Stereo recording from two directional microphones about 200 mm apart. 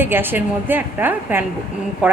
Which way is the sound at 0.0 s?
10° right (ahead or behind).